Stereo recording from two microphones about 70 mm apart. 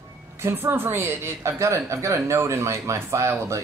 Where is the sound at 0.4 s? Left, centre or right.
Right.